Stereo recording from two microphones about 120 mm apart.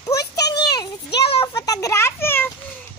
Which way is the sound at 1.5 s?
30° left (ahead or behind).